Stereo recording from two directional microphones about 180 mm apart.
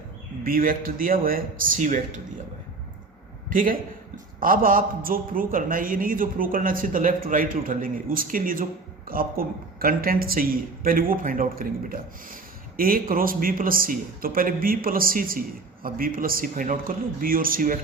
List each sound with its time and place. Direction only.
0.4 s speech: 55° right (ahead or behind)
3.5 s speech: 50° right (ahead or behind)